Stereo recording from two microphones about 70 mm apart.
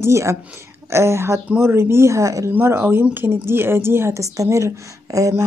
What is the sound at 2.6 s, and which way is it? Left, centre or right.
A woman's voice, right.